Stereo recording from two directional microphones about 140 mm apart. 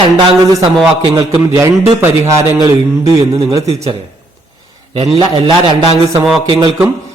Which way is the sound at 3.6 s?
45° right (ahead or behind).